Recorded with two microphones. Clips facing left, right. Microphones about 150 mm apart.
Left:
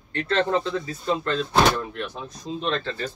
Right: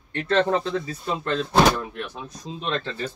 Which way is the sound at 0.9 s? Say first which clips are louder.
Left 2 dB; 15° right (ahead or behind).